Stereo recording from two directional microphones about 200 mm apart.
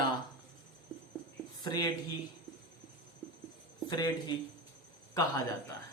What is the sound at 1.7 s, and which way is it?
Speech, 20° left (ahead or behind).